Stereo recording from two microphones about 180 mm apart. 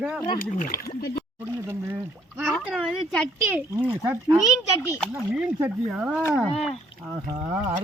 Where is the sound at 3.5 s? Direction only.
10° right (ahead or behind).